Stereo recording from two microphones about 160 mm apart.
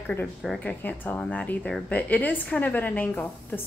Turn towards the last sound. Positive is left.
turn(degrees=10)  # may be behind; listen again after turning